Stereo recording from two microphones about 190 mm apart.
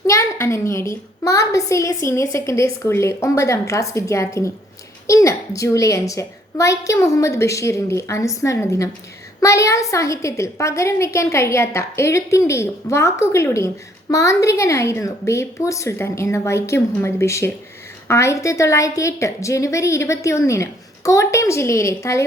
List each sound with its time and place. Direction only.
0.1 s a child's voice: 15° left (ahead or behind)